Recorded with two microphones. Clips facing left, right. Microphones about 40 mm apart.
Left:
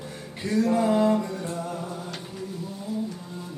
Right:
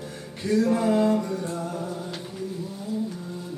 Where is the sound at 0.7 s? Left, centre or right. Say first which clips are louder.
Left 3 dB; centre.